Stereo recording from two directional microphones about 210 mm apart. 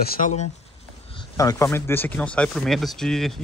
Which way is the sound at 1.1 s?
20° left (ahead or behind).